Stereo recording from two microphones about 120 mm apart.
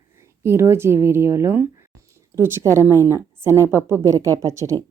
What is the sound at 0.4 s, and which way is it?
A woman's voice, 20° right (ahead or behind).